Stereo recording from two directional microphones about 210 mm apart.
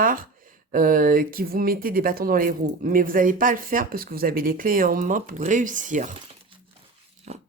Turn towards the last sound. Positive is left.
turn(degrees=-35)  # may be behind; listen again after turning